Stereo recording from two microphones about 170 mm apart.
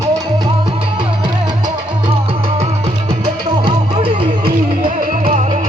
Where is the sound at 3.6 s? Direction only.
30° right (ahead or behind).